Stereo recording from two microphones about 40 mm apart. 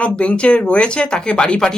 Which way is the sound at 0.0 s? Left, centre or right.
Left.